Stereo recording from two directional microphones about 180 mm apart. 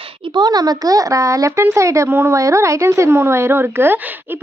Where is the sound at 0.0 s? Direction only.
25° right (ahead or behind).